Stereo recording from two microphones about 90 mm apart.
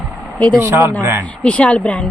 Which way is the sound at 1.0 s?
25° right (ahead or behind).